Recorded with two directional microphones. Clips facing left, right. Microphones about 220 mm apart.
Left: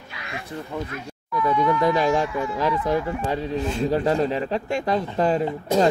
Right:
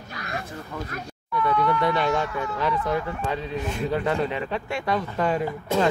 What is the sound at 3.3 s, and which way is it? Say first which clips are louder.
Speech: left 3 dB; 35° left (ahead or behind).